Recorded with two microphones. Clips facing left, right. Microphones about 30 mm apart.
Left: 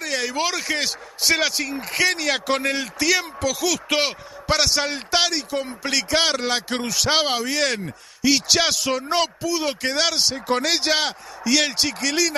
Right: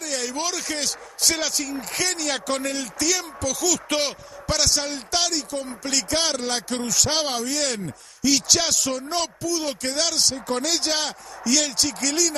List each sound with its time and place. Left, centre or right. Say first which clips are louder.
0.0 s speech: left 4 dB; left